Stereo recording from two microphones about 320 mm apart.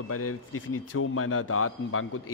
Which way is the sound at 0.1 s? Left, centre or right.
Left.